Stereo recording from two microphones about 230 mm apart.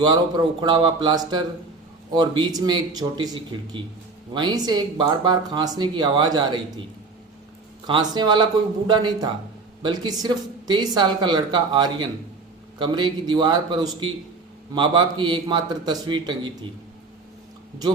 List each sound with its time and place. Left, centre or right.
0.0 s speech: centre
7.9 s speech: centre